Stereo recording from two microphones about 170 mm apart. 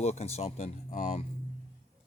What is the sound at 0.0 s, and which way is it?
Speech, 40° left (ahead or behind).